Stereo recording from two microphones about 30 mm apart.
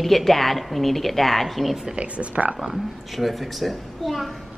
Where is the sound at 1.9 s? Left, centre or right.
Right.